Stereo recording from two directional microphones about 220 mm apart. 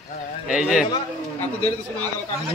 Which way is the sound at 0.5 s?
5° right (ahead or behind).